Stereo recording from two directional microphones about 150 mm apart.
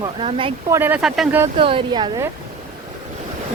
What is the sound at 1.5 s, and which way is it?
Speech, 35° right (ahead or behind).